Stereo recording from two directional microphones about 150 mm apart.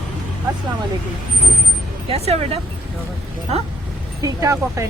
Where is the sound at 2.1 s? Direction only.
40° right (ahead or behind).